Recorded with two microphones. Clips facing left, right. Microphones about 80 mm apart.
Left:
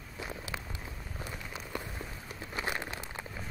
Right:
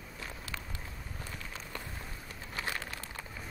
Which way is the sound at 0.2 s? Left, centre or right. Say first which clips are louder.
Left 4 dB; centre.